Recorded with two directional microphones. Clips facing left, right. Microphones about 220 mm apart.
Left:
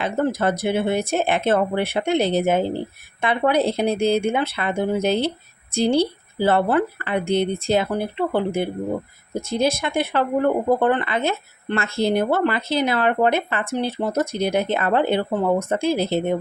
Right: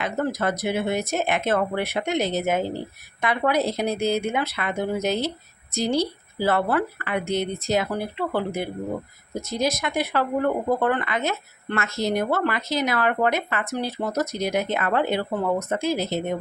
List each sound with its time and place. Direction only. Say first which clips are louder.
0.0 s speech: left 4 dB; 30° left (ahead or behind)